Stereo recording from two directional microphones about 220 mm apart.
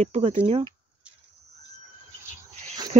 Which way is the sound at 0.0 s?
30° right (ahead or behind).